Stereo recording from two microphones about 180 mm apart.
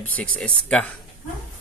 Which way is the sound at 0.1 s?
10° left (ahead or behind).